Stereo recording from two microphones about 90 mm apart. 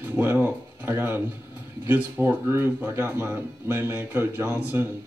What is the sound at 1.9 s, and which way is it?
A man's voice, 20° right (ahead or behind).